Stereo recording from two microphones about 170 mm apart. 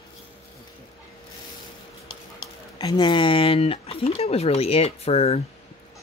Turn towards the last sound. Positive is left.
turn(degrees=35)  # may be behind; listen again after turning